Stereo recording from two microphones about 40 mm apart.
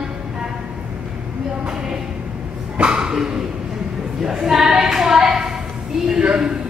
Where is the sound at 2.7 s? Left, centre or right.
Right.